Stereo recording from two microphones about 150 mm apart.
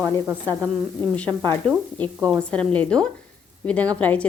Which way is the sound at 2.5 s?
10° left (ahead or behind).